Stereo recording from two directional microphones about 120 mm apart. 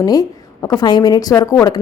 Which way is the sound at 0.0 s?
30° left (ahead or behind).